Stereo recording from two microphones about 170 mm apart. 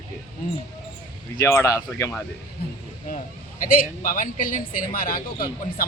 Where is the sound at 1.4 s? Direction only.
15° left (ahead or behind).